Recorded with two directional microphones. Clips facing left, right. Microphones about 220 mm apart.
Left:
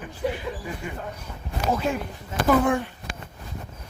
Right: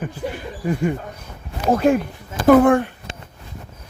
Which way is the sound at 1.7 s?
55° right (ahead or behind).